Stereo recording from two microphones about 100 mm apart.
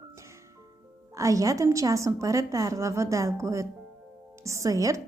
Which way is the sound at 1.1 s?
35° right (ahead or behind).